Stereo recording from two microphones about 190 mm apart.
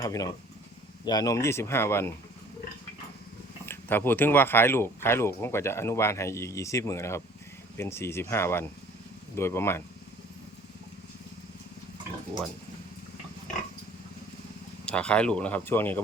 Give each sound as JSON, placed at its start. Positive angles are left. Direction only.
{"t": 0.0, "sound": "speech", "side_deg": 20}
{"t": 3.7, "sound": "speech", "side_deg": 10}
{"t": 14.8, "sound": "speech", "side_deg": 5}